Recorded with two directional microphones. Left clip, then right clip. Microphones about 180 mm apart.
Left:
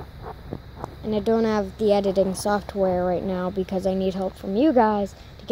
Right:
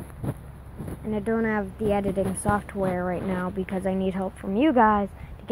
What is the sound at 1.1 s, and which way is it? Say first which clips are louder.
Speech: left 4 dB; 20° left (ahead or behind).